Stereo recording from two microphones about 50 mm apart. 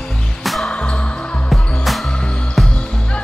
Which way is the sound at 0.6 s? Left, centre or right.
Left.